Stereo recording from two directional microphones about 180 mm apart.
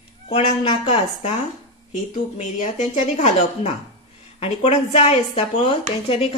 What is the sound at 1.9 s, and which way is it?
A woman's voice, 40° left (ahead or behind).